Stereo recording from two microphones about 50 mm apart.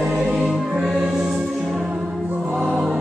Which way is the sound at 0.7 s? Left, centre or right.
Centre.